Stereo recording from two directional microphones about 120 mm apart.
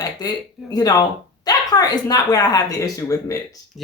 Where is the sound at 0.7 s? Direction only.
35° left (ahead or behind).